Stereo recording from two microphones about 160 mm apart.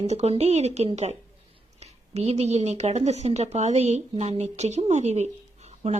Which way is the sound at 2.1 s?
40° right (ahead or behind).